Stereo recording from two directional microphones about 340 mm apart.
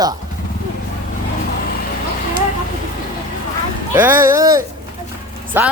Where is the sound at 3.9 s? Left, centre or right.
Centre.